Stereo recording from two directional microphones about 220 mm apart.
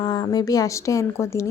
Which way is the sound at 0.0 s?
20° left (ahead or behind).